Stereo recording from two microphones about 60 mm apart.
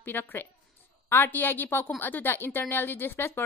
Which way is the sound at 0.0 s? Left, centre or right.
Left.